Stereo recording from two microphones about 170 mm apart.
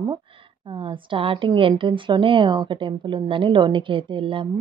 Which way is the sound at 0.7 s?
30° right (ahead or behind).